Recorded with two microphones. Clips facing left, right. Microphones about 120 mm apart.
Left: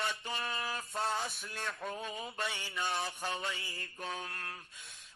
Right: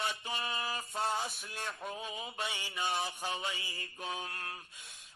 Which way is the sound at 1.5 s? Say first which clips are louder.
Left 2 dB; 25° right (ahead or behind).